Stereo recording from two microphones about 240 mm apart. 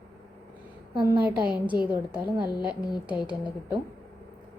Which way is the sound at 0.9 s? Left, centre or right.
Centre.